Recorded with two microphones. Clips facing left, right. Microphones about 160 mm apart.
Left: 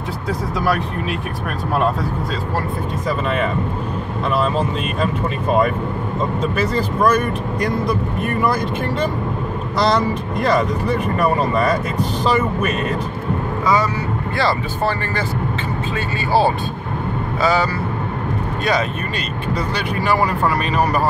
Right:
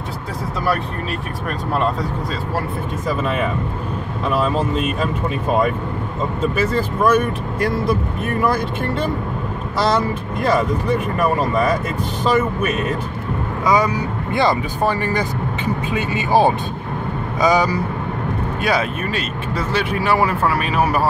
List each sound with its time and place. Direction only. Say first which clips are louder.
4.3 s speech: even; 10° right (ahead or behind)
6.4 s speech: right 3 dB; 5° right (ahead or behind)
9.8 s speech: left 1 dB; 5° right (ahead or behind)
12.4 s speech: even; 5° right (ahead or behind)
14.3 s speech: right 3 dB; 15° right (ahead or behind)